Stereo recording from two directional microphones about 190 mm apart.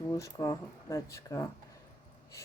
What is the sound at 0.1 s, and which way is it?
Speech, 20° left (ahead or behind).